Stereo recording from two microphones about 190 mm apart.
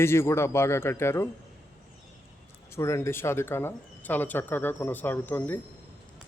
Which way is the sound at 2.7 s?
15° left (ahead or behind).